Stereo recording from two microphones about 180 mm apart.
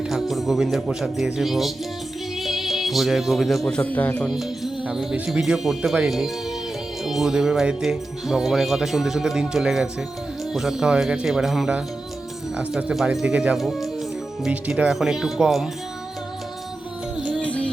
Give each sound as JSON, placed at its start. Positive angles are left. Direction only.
{"t": 0.1, "sound": "speech", "side_deg": 0}
{"t": 17.2, "sound": "music", "side_deg": 5}